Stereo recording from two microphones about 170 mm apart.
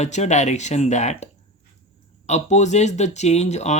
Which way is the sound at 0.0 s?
40° left (ahead or behind).